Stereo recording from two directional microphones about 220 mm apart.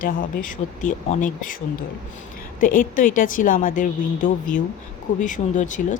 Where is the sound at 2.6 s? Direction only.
35° left (ahead or behind).